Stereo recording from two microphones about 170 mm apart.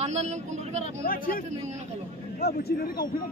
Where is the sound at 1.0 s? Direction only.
55° left (ahead or behind).